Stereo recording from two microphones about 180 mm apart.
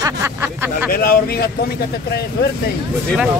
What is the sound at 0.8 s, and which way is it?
Speech, 60° left (ahead or behind).